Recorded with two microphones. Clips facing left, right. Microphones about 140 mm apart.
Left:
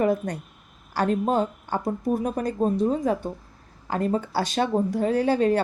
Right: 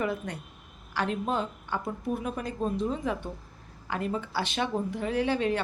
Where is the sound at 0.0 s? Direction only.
40° left (ahead or behind).